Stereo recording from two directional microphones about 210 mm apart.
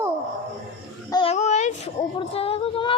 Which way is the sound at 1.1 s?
30° left (ahead or behind).